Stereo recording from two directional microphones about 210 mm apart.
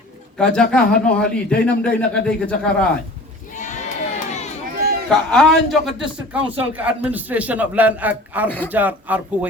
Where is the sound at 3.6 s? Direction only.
35° left (ahead or behind).